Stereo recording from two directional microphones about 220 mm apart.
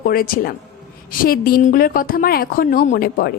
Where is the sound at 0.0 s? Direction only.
40° left (ahead or behind).